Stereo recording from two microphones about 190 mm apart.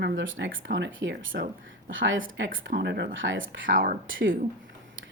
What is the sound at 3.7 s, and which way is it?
Speech, 45° right (ahead or behind).